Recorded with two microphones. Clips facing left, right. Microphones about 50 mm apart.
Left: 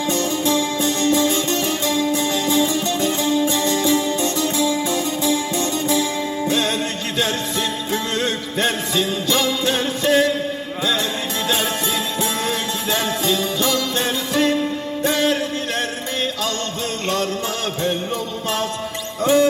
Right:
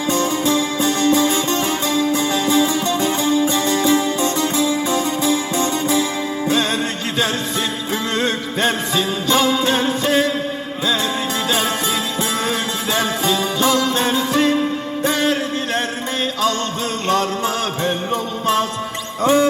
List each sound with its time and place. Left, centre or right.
0.1 s music: centre
8.1 s music: centre
11.4 s music: centre
12.9 s jingle bell: centre
15.0 s music: centre
18.1 s music: right